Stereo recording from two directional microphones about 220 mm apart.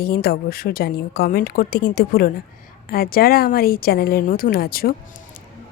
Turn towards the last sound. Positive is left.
turn(degrees=40)  # may be behind; listen again after turning